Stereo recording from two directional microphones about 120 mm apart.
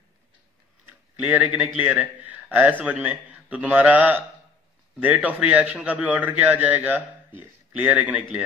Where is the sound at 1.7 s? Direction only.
10° right (ahead or behind).